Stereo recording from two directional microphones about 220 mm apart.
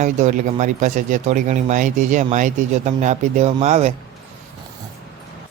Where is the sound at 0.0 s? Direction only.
35° right (ahead or behind).